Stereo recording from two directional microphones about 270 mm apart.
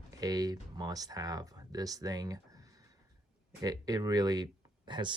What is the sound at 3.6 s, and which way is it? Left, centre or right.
Speech, centre.